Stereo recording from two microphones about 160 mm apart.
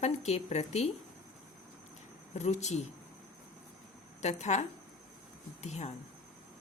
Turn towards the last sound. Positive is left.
turn(degrees=45)  # may be behind; listen again after turning